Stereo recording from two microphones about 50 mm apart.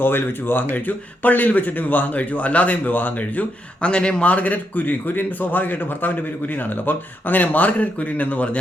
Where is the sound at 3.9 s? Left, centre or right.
Left.